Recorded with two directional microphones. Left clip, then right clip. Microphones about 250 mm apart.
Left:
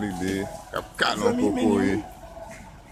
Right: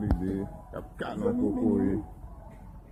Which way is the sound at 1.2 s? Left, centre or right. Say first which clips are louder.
Left 6 dB; left.